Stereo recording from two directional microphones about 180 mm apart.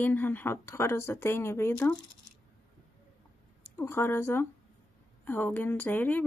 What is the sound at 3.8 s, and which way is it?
Speech, 15° left (ahead or behind).